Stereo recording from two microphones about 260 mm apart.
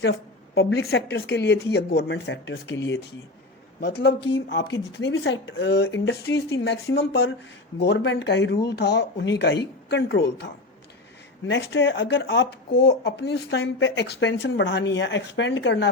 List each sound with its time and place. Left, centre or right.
0.0 s a woman's voice: left